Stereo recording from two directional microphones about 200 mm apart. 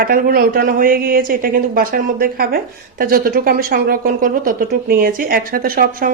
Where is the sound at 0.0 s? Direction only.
45° right (ahead or behind).